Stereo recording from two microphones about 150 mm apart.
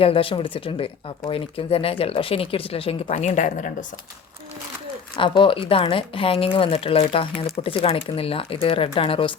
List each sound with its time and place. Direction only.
0.0 s speech: 40° left (ahead or behind); by 3.8 s 60° left (ahead or behind)
5.1 s speech: 35° left (ahead or behind)